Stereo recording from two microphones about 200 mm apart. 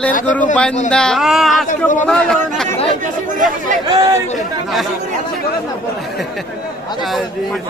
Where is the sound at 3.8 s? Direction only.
20° right (ahead or behind).